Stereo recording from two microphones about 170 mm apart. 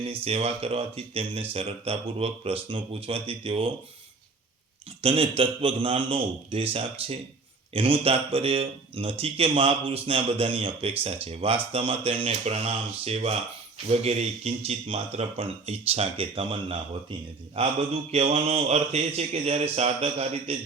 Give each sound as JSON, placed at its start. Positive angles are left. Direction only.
{"t": 0.0, "sound": "a man's voice", "side_deg": -35}
{"t": 5.0, "sound": "a man's voice", "side_deg": -35}